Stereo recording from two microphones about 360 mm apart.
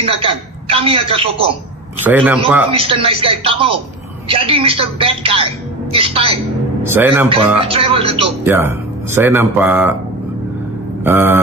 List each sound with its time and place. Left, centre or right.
0.0 s speech: centre
2.0 s a man's voice: centre
2.7 s speech: centre
11.1 s a man's voice: centre